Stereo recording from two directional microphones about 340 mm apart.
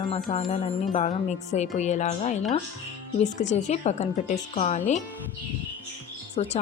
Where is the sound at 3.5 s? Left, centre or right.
Centre.